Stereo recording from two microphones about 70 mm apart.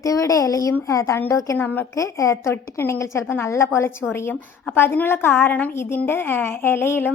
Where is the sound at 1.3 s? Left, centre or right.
Left.